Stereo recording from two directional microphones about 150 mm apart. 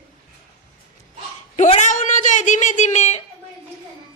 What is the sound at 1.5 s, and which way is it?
A woman's voice, 55° left (ahead or behind).